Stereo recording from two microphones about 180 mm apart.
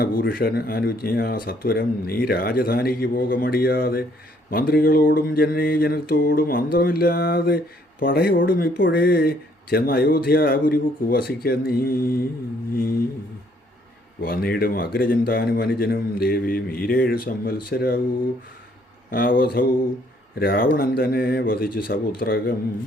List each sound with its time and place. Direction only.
0.0 s mantra: 55° left (ahead or behind)
14.2 s mantra: 55° left (ahead or behind)
19.1 s speech: 55° left (ahead or behind)
20.4 s mantra: 55° left (ahead or behind)